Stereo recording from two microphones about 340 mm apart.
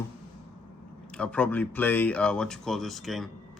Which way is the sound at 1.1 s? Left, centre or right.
Centre.